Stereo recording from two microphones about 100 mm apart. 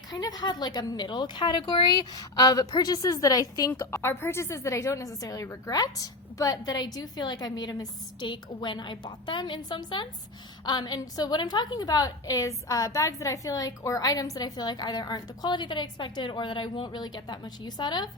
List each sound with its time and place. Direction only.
0.1 s a woman's voice: 40° left (ahead or behind)